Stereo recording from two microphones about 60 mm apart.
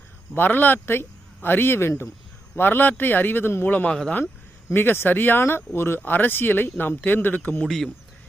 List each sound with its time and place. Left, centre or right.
0.3 s speech: left
3.7 s a man's voice: left
4.7 s speech: left